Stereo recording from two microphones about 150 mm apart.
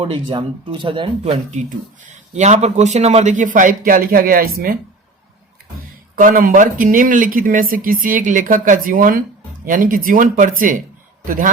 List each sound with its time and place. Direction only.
0.0 s speech: 35° right (ahead or behind); by 4.8 s 70° right (ahead or behind)
6.1 s speech: 65° right (ahead or behind)